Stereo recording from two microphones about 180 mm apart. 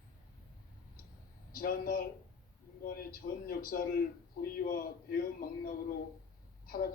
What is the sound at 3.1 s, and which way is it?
A man's voice, 55° left (ahead or behind).